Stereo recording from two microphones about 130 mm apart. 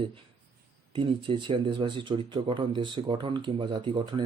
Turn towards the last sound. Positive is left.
turn(degrees=-35)  # may be behind; listen again after turning